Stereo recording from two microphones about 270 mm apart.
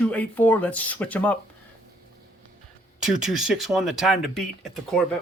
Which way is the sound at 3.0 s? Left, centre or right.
Centre.